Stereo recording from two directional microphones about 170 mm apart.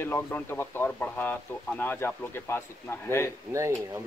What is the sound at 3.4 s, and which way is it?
Speech, 15° right (ahead or behind).